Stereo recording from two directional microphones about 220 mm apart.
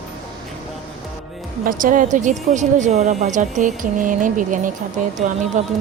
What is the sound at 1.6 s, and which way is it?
Speech, 35° right (ahead or behind).